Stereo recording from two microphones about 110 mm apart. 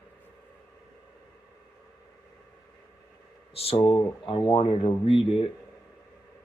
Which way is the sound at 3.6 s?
60° left (ahead or behind).